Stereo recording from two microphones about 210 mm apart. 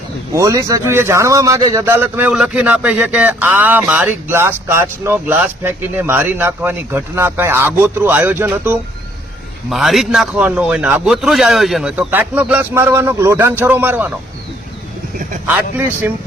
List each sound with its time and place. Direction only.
0.3 s a man's voice: 15° right (ahead or behind)